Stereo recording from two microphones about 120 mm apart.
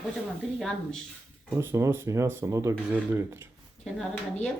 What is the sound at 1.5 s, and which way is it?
Speech, 25° right (ahead or behind).